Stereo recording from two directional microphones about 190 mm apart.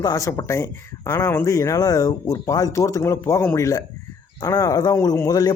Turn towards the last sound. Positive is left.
turn(degrees=20)  # may be behind; listen again after turning